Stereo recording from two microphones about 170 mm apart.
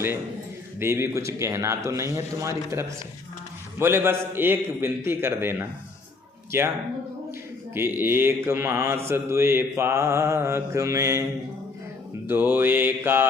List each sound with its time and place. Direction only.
0.8 s mantra: 15° right (ahead or behind)
7.7 s mantra: 10° right (ahead or behind)
12.3 s mantra: 10° right (ahead or behind)